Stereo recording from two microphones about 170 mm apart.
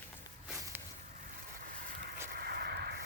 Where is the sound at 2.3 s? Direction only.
65° right (ahead or behind).